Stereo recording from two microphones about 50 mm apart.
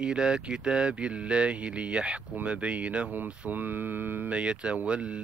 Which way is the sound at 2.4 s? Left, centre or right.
Right.